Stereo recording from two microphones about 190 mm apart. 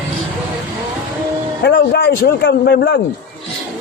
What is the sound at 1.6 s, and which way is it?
A man's voice, 60° left (ahead or behind).